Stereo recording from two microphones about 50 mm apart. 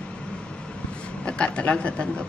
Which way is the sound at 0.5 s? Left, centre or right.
Left.